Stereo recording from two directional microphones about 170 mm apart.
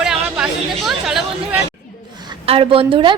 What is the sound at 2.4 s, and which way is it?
Speech, 35° right (ahead or behind).